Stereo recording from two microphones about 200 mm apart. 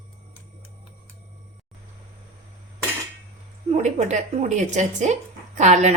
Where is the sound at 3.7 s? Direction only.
35° right (ahead or behind).